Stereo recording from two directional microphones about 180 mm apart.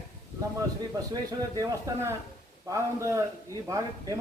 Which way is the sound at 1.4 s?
15° right (ahead or behind).